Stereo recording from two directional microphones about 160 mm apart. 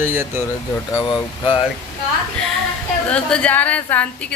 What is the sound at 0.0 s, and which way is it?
Speech, 15° right (ahead or behind).